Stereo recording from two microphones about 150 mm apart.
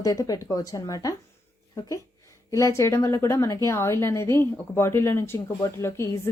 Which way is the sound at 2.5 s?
20° left (ahead or behind).